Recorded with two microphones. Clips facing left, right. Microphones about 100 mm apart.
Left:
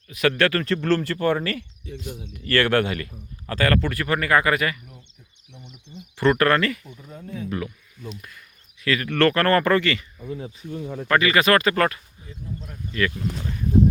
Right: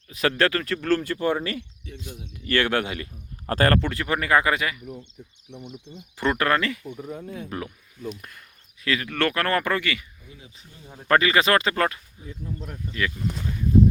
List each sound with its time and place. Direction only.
0.1 s speech: 30° right (ahead or behind)
0.5 s speech: 5° right (ahead or behind)
3.4 s speech: 45° right (ahead or behind)
3.8 s speech: 20° right (ahead or behind)
5.5 s speech: 50° right (ahead or behind)
6.1 s speech: 15° right (ahead or behind)
6.9 s speech: 65° right (ahead or behind)
7.2 s speech: 20° right (ahead or behind)
8.8 s speech: 20° right (ahead or behind)
10.7 s speech: 75° left (ahead or behind)
11.1 s speech: 30° right (ahead or behind); by 13.2 s 10° right (ahead or behind)